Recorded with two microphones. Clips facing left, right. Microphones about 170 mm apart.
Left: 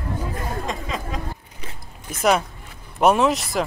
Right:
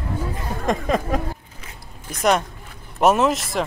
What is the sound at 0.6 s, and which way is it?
Speech, 55° right (ahead or behind).